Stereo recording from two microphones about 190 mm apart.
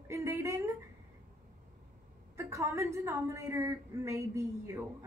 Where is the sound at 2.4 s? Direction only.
15° right (ahead or behind).